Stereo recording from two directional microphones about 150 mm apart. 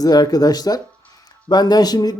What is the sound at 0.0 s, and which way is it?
Speech, 25° left (ahead or behind).